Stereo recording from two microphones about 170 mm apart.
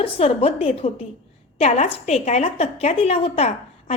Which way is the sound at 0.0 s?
35° left (ahead or behind).